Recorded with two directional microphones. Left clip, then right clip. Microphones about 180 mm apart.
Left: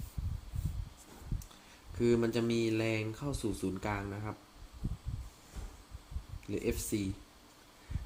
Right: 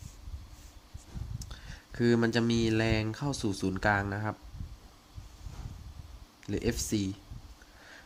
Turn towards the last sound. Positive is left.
turn(degrees=-50)  # may be behind; listen again after turning